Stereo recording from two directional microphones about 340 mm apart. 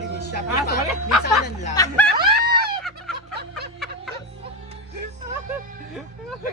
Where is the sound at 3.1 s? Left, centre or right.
Right.